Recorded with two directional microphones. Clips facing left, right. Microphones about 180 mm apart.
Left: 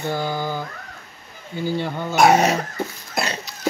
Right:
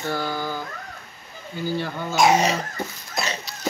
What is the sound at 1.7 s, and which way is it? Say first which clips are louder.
Speech: left 2 dB; 20° left (ahead or behind).